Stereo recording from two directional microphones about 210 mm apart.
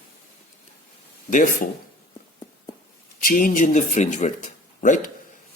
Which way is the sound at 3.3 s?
40° left (ahead or behind).